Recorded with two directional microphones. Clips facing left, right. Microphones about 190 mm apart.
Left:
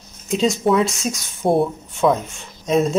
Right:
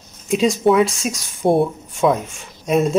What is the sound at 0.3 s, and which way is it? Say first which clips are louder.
A man's voice: right 2 dB; 10° right (ahead or behind).